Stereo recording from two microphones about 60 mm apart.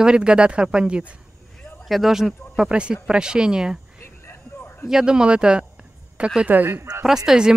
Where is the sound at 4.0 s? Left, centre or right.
Left.